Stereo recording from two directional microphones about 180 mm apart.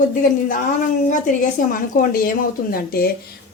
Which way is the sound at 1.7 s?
50° left (ahead or behind).